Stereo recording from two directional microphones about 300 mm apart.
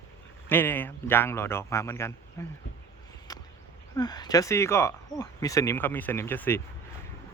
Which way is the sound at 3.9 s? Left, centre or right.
Centre.